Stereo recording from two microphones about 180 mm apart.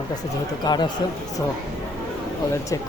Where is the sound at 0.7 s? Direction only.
25° left (ahead or behind).